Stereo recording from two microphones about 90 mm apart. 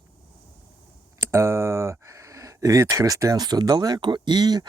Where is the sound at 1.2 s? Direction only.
30° right (ahead or behind).